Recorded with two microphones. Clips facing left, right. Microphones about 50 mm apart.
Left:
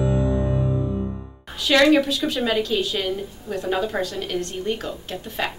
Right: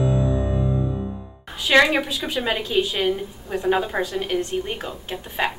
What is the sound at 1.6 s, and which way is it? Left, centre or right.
A woman's voice, centre.